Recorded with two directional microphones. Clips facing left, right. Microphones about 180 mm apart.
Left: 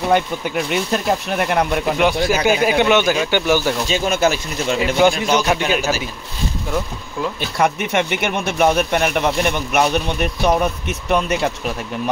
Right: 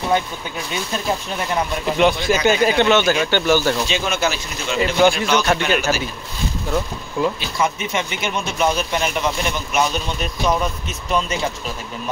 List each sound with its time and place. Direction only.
0.7 s speech: 65° left (ahead or behind)
2.0 s a man's voice: 10° left (ahead or behind)
3.9 s speech: 45° left (ahead or behind)
4.7 s a man's voice: 10° left (ahead or behind)
7.5 s speech: 65° left (ahead or behind)